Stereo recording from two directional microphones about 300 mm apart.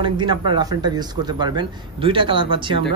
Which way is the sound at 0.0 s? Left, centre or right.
Centre.